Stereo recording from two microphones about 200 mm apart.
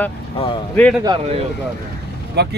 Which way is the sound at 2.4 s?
55° right (ahead or behind).